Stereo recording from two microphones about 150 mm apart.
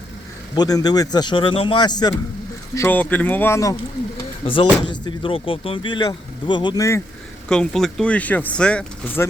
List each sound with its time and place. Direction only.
0.5 s speech: 25° left (ahead or behind)
2.7 s speech: 15° left (ahead or behind)
4.4 s speech: 35° left (ahead or behind)
7.4 s speech: 5° left (ahead or behind)